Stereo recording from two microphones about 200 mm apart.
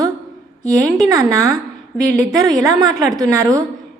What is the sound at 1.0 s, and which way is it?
A woman's voice, 15° right (ahead or behind).